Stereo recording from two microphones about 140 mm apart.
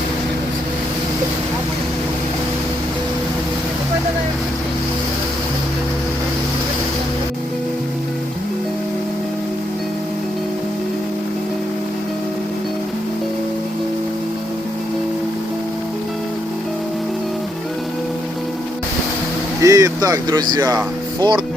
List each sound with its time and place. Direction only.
19.6 s speech: 25° right (ahead or behind)